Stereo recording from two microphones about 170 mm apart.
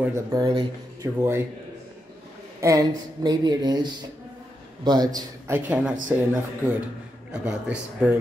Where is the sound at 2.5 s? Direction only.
20° right (ahead or behind).